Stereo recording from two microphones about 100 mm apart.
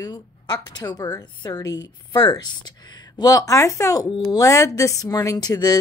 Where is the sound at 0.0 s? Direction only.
45° left (ahead or behind).